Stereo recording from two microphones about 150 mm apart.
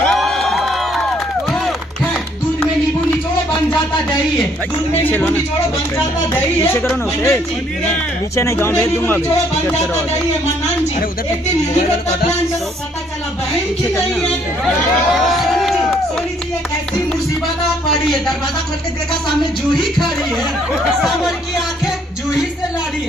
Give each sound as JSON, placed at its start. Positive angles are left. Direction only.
{"t": 0.0, "sound": "crowd", "side_deg": 5}
{"t": 5.0, "sound": "speech", "side_deg": 15}
{"t": 6.9, "sound": "speech", "side_deg": 15}
{"t": 15.1, "sound": "crowd", "side_deg": 0}